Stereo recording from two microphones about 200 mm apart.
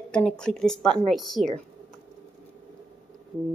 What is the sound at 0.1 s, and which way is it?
A woman's voice, 5° left (ahead or behind).